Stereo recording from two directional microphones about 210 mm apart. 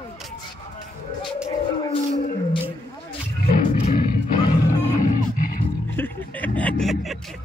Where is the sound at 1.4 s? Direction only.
30° left (ahead or behind).